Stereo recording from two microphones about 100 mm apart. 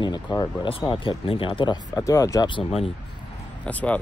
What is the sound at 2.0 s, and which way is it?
Speech, 30° left (ahead or behind).